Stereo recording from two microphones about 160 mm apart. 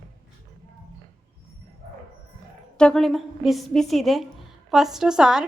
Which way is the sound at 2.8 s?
5° left (ahead or behind).